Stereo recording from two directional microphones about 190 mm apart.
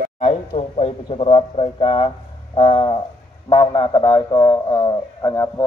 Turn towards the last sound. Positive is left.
turn(degrees=20)  # may be behind; listen again after turning